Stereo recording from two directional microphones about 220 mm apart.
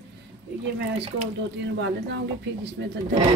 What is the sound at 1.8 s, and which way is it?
A woman's voice, 50° right (ahead or behind).